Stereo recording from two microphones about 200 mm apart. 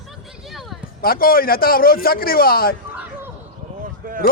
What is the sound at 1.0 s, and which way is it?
A man's voice, 50° left (ahead or behind).